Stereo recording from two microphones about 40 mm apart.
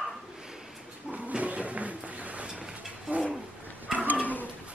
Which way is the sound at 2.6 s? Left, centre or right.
Right.